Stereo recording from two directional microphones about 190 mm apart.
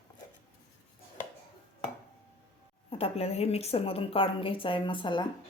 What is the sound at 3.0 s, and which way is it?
A woman's voice, 30° left (ahead or behind).